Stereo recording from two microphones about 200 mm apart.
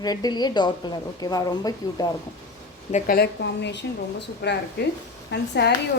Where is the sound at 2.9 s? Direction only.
50° left (ahead or behind).